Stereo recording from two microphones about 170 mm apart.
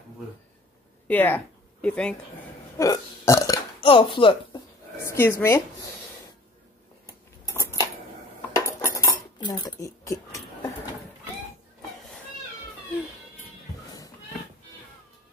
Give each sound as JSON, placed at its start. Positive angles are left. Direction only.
{"t": 1.0, "sound": "a woman's voice", "side_deg": 10}
{"t": 2.8, "sound": "burping", "side_deg": 20}
{"t": 3.8, "sound": "speech", "side_deg": 30}
{"t": 5.0, "sound": "speech", "side_deg": 15}
{"t": 7.4, "sound": "a sound", "side_deg": 20}
{"t": 8.8, "sound": "cutlery", "side_deg": 20}